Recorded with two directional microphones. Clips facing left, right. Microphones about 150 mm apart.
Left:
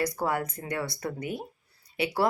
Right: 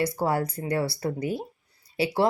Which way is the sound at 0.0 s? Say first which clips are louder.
Right 3 dB; 25° right (ahead or behind).